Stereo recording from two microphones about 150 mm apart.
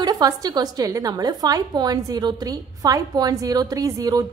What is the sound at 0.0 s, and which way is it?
A woman's voice, 25° right (ahead or behind).